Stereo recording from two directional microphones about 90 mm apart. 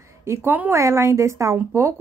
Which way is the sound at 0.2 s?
30° right (ahead or behind).